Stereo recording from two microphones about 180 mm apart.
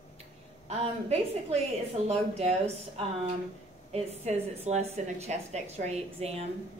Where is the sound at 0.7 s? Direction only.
35° right (ahead or behind).